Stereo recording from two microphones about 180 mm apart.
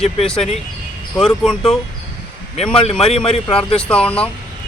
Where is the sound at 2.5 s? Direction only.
30° left (ahead or behind).